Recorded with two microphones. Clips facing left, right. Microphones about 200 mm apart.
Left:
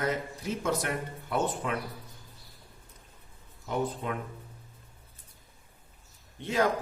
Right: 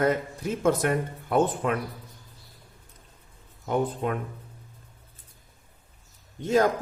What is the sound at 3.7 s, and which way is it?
Speech, 50° right (ahead or behind).